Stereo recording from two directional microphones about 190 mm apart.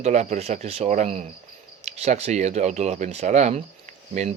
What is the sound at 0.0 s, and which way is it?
Speech, 35° right (ahead or behind).